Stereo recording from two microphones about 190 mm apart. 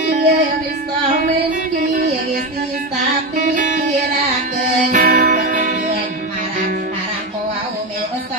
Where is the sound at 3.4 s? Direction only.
45° right (ahead or behind).